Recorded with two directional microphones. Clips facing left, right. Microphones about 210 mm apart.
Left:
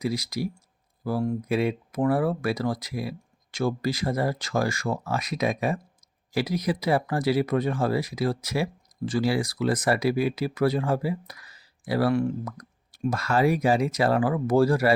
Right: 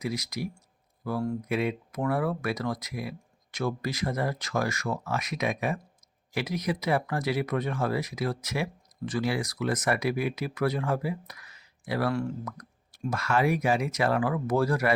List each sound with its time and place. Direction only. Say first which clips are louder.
0.0 s speech: left 4 dB; 30° left (ahead or behind)
12.5 s plop: left 2 dB; 30° left (ahead or behind)
13.1 s speech: left 3 dB; 35° left (ahead or behind)